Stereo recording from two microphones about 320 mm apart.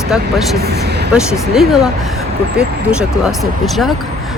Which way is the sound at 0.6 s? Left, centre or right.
Right.